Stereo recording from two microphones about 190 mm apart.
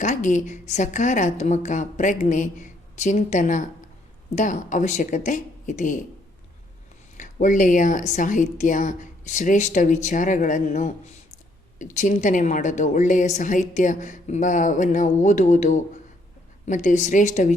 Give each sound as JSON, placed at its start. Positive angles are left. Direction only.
{"t": 0.0, "sound": "a woman's voice", "side_deg": 40}
{"t": 7.2, "sound": "a woman's voice", "side_deg": 40}